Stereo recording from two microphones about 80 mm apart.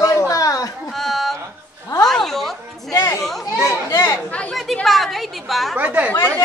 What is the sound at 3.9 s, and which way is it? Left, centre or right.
Speech, left.